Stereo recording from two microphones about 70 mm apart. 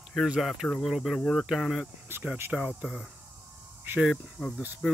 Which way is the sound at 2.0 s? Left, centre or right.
Right.